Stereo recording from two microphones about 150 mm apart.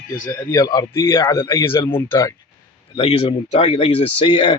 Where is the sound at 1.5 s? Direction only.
20° left (ahead or behind).